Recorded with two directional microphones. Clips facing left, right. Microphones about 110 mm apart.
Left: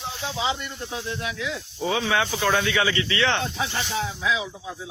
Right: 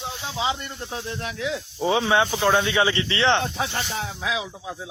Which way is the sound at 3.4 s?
40° right (ahead or behind).